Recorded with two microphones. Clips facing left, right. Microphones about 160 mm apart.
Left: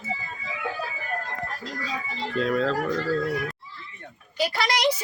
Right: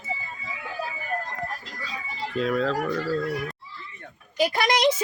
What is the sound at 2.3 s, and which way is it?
Speech, centre (ahead or behind).